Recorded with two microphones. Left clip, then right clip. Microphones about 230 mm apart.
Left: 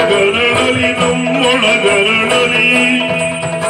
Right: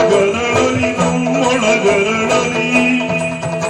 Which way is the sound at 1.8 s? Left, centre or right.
Right.